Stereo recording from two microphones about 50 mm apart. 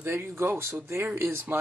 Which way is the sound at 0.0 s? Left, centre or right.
Right.